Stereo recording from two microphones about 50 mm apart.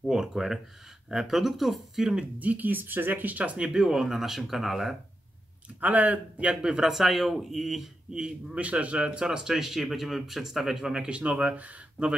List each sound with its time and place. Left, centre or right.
0.1 s speech: centre
2.3 s speech: right; by 4.9 s centre
5.8 s speech: right
6.5 s speech: centre
6.8 s speech: centre
8.5 s speech: right